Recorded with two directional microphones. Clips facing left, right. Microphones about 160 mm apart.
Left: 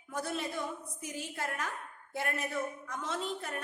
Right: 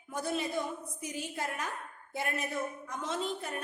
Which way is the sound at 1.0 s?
15° right (ahead or behind).